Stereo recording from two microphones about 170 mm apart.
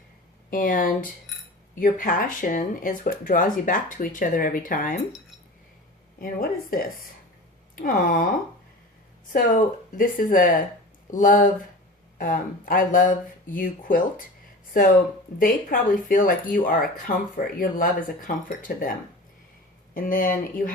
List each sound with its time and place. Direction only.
0.5 s speech: 55° left (ahead or behind)
6.1 s speech: 60° left (ahead or behind)
9.3 s speech: 50° left (ahead or behind)
15.4 s speech: 55° left (ahead or behind)